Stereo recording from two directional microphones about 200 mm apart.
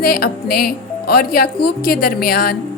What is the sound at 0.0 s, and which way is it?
A woman's voice, 50° left (ahead or behind).